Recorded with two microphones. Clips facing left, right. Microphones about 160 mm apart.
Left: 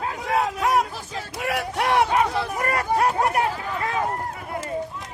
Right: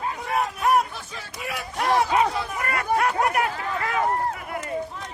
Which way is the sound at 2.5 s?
40° left (ahead or behind).